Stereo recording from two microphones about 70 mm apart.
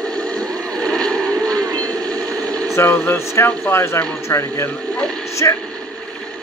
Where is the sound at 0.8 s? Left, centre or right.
Centre.